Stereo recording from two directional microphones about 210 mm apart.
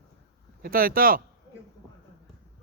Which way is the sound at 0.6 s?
45° right (ahead or behind).